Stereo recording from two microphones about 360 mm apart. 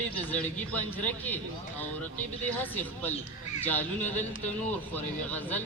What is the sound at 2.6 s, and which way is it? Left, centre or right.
A man's voice, centre.